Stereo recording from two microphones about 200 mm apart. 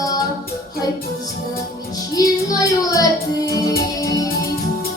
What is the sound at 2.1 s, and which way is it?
Child singing, 20° left (ahead or behind).